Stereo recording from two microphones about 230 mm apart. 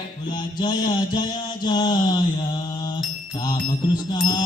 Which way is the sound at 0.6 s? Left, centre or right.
Centre.